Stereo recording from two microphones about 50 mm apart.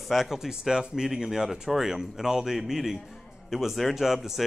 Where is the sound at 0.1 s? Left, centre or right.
Centre.